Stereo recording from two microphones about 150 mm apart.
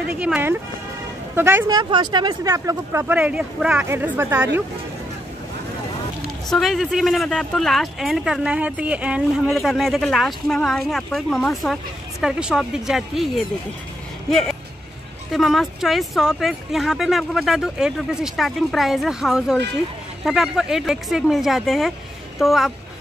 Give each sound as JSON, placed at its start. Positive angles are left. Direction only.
{"t": 0.1, "sound": "speech", "side_deg": -10}
{"t": 1.7, "sound": "speech", "side_deg": -30}
{"t": 6.5, "sound": "speech", "side_deg": 0}
{"t": 15.3, "sound": "speech", "side_deg": 0}